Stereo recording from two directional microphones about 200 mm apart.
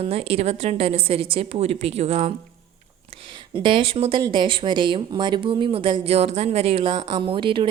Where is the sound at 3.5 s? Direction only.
25° right (ahead or behind).